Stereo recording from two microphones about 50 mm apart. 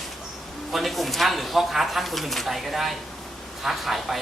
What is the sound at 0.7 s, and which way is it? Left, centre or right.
Speech, centre.